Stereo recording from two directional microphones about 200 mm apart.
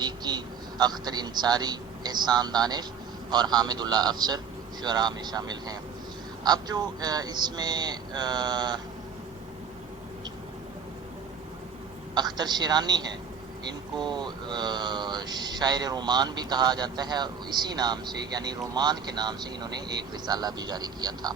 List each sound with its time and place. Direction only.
0.0 s a man's voice: 20° right (ahead or behind)
12.1 s speech: 20° right (ahead or behind)
14.0 s speech: 20° right (ahead or behind)